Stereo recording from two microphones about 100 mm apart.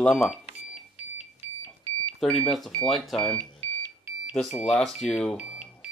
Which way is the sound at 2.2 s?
5° left (ahead or behind).